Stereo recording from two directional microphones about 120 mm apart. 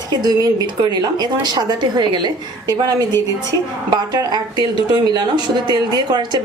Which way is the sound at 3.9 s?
35° right (ahead or behind).